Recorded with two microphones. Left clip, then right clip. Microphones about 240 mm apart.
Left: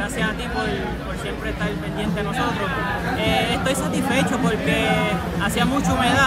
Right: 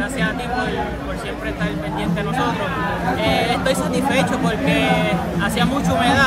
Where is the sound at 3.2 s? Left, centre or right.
Centre.